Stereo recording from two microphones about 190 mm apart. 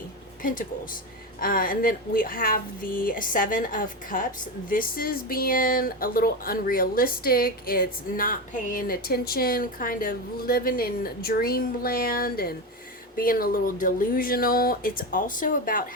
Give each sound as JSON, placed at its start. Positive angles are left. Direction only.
{"t": 1.4, "sound": "speech", "side_deg": 50}